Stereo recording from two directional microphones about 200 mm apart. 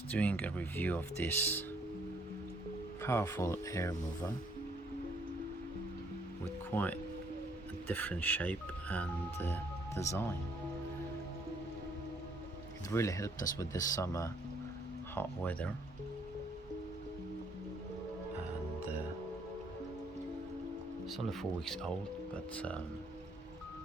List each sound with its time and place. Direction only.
0.1 s speech: 5° left (ahead or behind)
3.0 s speech: 15° left (ahead or behind)
6.7 s speech: 10° left (ahead or behind)
12.9 s speech: 15° left (ahead or behind)
21.1 s speech: centre (ahead or behind)